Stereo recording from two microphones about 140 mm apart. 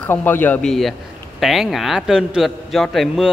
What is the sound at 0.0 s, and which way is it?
A man's voice, 15° left (ahead or behind).